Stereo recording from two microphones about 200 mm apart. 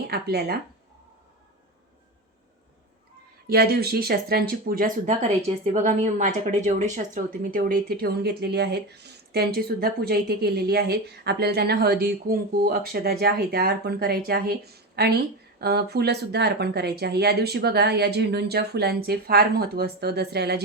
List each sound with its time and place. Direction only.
0.1 s a woman's voice: 50° right (ahead or behind)
3.4 s a woman's voice: 50° right (ahead or behind)